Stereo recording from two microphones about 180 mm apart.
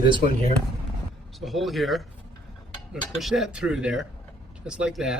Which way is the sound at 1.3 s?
Centre (ahead or behind).